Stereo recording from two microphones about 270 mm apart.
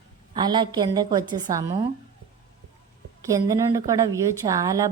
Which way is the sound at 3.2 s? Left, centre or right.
Centre.